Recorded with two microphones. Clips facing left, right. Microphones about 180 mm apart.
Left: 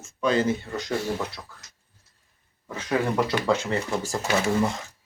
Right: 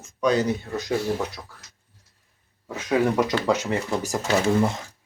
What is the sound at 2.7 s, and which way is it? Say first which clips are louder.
Speech: right 3 dB; 15° right (ahead or behind).